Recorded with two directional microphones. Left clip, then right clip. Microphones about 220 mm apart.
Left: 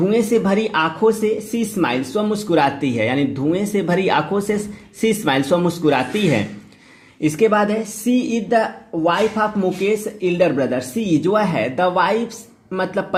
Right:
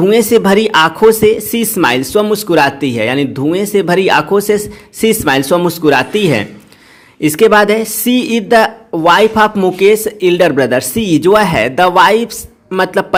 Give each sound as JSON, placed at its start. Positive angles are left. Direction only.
{"t": 0.0, "sound": "speech", "side_deg": -35}